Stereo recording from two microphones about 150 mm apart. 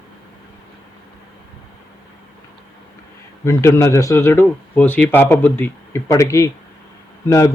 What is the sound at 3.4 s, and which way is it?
A man's voice, 20° left (ahead or behind).